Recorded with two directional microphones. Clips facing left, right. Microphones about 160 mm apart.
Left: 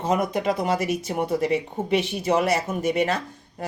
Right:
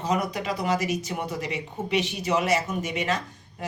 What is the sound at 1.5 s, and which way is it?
Speech, 30° left (ahead or behind).